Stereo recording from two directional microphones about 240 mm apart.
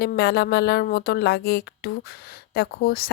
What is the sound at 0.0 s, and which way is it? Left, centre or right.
Speech, left.